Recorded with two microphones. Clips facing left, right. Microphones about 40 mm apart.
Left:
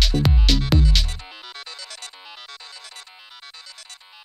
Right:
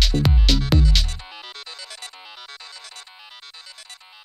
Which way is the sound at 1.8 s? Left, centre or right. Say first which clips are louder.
Even; right.